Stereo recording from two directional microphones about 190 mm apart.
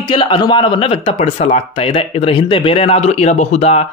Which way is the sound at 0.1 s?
25° left (ahead or behind).